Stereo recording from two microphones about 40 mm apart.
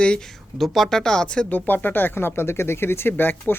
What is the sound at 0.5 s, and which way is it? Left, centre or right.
Speech, centre.